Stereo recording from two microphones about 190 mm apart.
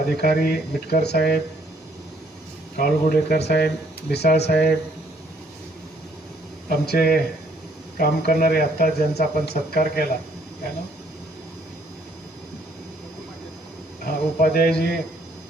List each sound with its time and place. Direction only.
0.2 s speech: 55° left (ahead or behind)
2.7 s speech: 50° left (ahead or behind)
6.7 s speech: 55° left (ahead or behind)
14.0 s speech: 50° left (ahead or behind)